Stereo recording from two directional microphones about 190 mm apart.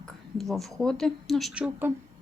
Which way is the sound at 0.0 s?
Centre (ahead or behind).